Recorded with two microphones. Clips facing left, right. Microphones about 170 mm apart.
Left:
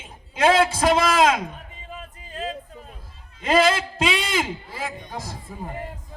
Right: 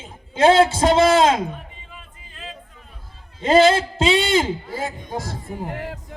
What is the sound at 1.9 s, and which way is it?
Music, 40° left (ahead or behind).